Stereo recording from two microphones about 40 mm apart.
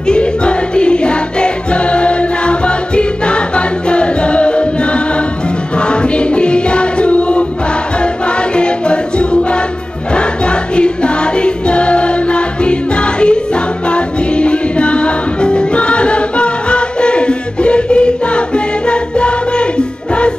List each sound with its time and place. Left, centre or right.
0.0 s music: left